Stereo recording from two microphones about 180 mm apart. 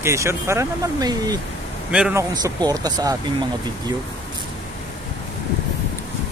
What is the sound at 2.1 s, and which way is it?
Speech, 20° right (ahead or behind).